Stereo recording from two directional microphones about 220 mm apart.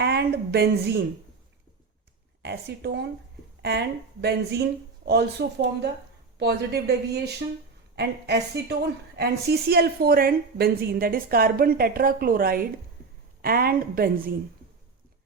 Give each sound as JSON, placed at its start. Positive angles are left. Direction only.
{"t": 0.0, "sound": "a woman's voice", "side_deg": -45}
{"t": 2.4, "sound": "a woman's voice", "side_deg": -50}
{"t": 9.1, "sound": "a woman's voice", "side_deg": -45}